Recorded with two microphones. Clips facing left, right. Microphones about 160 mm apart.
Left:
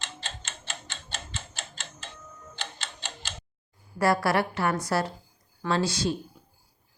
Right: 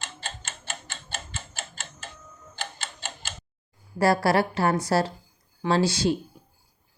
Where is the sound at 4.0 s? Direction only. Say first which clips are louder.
Right 3 dB; 30° right (ahead or behind).